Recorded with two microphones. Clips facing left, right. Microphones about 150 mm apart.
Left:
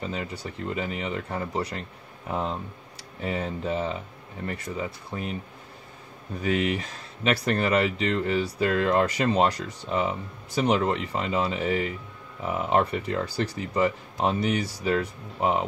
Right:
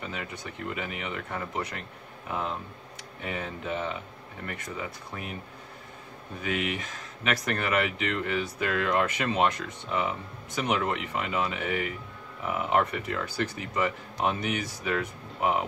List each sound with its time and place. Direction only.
0.0 s speech: 30° left (ahead or behind)
3.2 s speech: 35° left (ahead or behind)
6.4 s speech: 35° left (ahead or behind)